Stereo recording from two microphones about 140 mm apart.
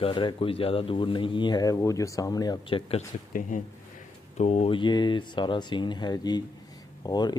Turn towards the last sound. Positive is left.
turn(degrees=30)  # may be behind; listen again after turning